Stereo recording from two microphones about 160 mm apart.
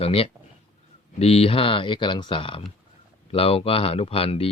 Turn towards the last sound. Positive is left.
turn(degrees=35)  # may be behind; listen again after turning